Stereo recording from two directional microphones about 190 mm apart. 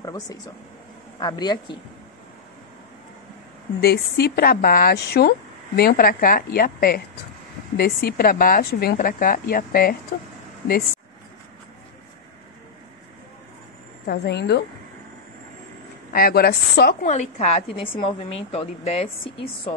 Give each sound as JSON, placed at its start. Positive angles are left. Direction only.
{"t": 0.0, "sound": "speech", "side_deg": 20}
{"t": 3.8, "sound": "a woman's voice", "side_deg": 55}
{"t": 14.0, "sound": "a woman's voice", "side_deg": 60}
{"t": 16.1, "sound": "a woman's voice", "side_deg": 55}
{"t": 17.0, "sound": "a woman's voice", "side_deg": 35}